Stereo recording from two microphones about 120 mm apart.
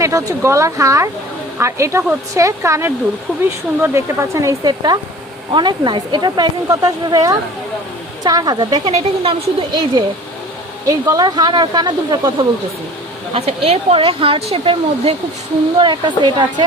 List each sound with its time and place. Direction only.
0.0 s speech: 25° right (ahead or behind); by 10.0 s 45° right (ahead or behind)
10.8 s speech: 30° right (ahead or behind)
13.3 s speech: 55° right (ahead or behind)
15.8 s speech: 40° right (ahead or behind)